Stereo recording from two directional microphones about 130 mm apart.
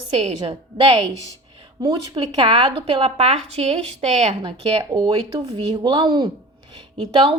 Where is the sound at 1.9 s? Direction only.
40° right (ahead or behind); by 4.5 s 55° right (ahead or behind).